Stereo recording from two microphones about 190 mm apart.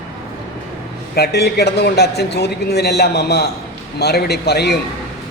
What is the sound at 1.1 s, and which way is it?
A man's voice, 60° left (ahead or behind).